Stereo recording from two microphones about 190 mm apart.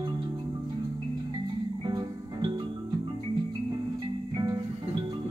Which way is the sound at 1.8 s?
20° right (ahead or behind).